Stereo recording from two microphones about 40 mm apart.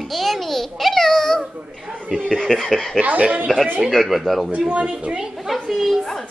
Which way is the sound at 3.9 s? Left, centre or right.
Centre.